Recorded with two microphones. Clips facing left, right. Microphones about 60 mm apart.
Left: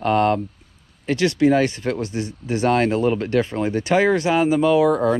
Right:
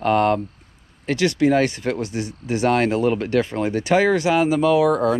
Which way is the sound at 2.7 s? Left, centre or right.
Right.